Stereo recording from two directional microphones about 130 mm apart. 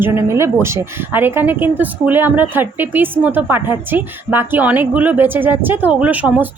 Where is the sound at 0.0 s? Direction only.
20° right (ahead or behind).